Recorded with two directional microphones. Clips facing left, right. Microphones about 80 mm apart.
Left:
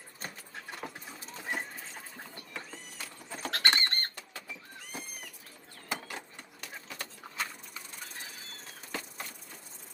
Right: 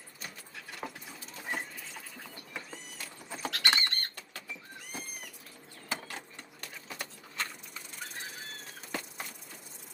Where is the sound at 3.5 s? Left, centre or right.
Left.